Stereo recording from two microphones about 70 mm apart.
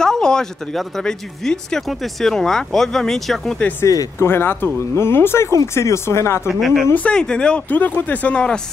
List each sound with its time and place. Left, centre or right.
0.0 s a sound: centre
0.7 s speech: centre
3.8 s speech: left
4.2 s speech: left
6.5 s speech: centre
6.9 s speech: left